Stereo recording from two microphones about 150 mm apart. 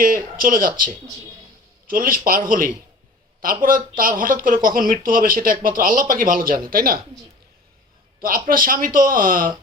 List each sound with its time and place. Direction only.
0.0 s speech: 70° right (ahead or behind)
8.2 s speech: 75° right (ahead or behind)